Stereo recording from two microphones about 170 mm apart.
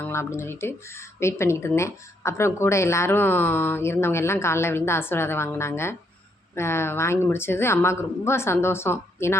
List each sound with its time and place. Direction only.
0.0 s speech: 15° left (ahead or behind)